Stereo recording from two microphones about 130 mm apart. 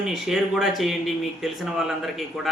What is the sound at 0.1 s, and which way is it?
A man's voice, centre (ahead or behind).